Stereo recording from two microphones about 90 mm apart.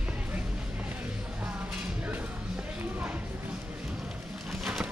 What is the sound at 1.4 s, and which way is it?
Music, 15° right (ahead or behind).